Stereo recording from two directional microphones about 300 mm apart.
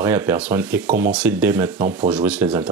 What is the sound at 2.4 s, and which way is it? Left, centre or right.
Speech, centre.